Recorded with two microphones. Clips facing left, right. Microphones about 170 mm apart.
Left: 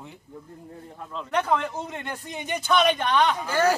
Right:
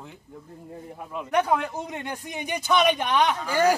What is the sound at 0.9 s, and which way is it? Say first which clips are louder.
A man's voice: right 3 dB; 15° right (ahead or behind).